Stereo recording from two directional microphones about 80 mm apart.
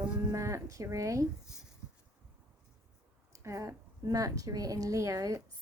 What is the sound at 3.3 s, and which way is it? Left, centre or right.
A woman's voice, right.